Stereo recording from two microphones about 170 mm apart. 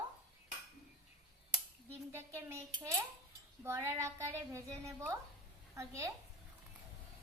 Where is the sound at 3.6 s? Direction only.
15° right (ahead or behind).